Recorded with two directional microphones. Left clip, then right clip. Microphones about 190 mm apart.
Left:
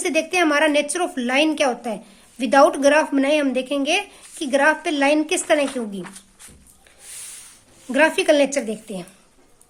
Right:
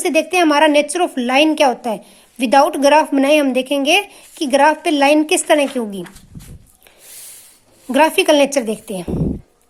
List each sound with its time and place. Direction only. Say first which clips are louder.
0.0 s a woman's voice: right 5 dB; 25° right (ahead or behind)
7.9 s a woman's voice: right 4 dB; 25° right (ahead or behind)